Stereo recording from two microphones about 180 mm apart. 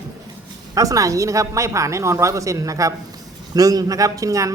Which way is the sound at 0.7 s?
20° right (ahead or behind).